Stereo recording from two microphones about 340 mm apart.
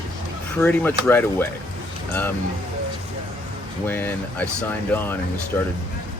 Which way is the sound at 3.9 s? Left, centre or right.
Centre.